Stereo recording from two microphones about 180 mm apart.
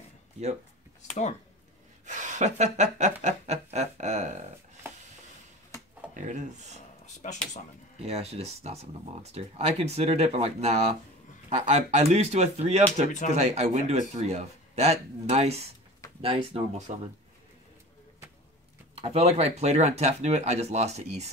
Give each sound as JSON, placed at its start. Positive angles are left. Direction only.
{"t": 2.0, "sound": "speech", "side_deg": -45}
{"t": 6.1, "sound": "speech", "side_deg": -45}
{"t": 7.2, "sound": "speech", "side_deg": 40}
{"t": 8.0, "sound": "speech", "side_deg": -35}
{"t": 18.9, "sound": "speech", "side_deg": -35}